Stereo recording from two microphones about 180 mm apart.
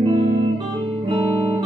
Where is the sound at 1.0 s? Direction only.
35° right (ahead or behind).